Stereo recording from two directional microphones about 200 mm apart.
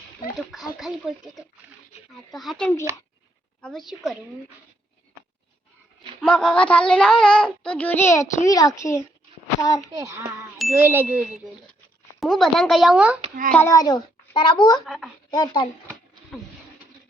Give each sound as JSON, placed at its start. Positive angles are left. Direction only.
{"t": 0.8, "sound": "speech", "side_deg": 0}
{"t": 6.1, "sound": "a child's voice", "side_deg": 5}
{"t": 9.9, "sound": "ding", "side_deg": -15}
{"t": 12.2, "sound": "speech", "side_deg": 0}
{"t": 13.5, "sound": "a child's voice", "side_deg": 10}
{"t": 14.8, "sound": "speech", "side_deg": 0}
{"t": 15.3, "sound": "a child's voice", "side_deg": 20}